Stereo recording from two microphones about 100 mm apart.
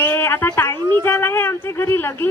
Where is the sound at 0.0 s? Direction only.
25° left (ahead or behind).